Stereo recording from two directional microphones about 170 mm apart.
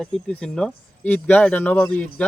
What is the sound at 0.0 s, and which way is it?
Speech, 5° left (ahead or behind).